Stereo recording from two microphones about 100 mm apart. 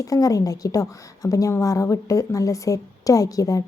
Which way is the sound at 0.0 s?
35° left (ahead or behind).